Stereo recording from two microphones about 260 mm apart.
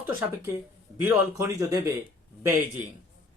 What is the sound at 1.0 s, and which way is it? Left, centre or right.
Speech, centre.